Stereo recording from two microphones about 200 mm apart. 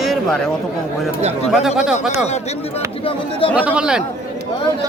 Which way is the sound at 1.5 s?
Centre (ahead or behind).